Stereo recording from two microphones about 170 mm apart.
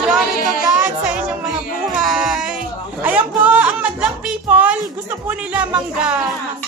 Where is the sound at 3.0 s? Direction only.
10° right (ahead or behind).